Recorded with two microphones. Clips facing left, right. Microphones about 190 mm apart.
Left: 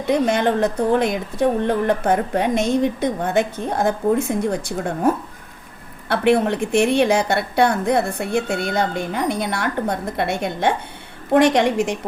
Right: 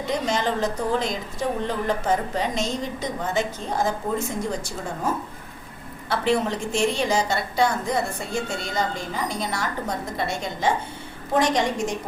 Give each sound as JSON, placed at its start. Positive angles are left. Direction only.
{"t": 0.1, "sound": "a woman's voice", "side_deg": 60}